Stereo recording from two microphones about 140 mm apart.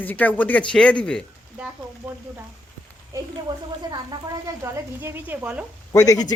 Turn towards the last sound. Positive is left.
turn(degrees=25)  # may be behind; listen again after turning